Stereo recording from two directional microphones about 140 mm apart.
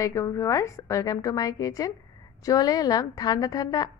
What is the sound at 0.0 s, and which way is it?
A woman's voice, 20° left (ahead or behind).